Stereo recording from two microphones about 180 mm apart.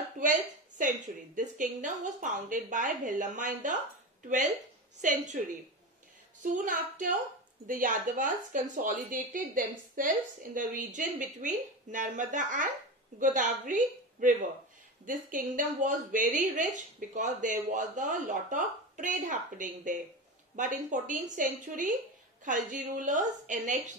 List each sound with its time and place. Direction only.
0.2 s a woman's voice: 45° right (ahead or behind)
5.0 s a woman's voice: 40° right (ahead or behind)
6.4 s a woman's voice: 45° right (ahead or behind)